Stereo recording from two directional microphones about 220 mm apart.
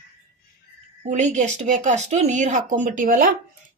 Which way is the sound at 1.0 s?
35° right (ahead or behind).